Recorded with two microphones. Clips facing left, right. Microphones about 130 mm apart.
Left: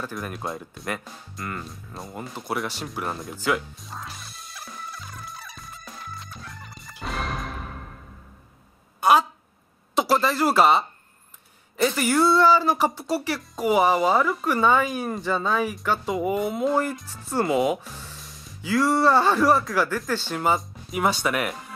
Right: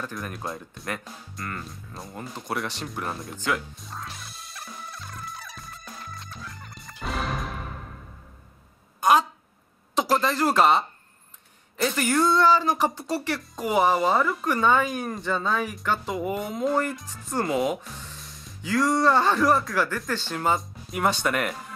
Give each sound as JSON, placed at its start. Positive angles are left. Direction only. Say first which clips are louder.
{"t": 0.0, "sound": "speech", "louder": "left 2 dB", "side_deg": 5}
{"t": 2.2, "sound": "music", "louder": "left 1 dB", "side_deg": 5}
{"t": 9.0, "sound": "a sound", "louder": "left 1 dB", "side_deg": 10}
{"t": 11.7, "sound": "speech", "louder": "left 2 dB", "side_deg": 5}